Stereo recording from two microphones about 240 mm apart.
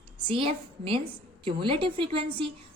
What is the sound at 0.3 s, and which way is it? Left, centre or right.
A woman's voice, right.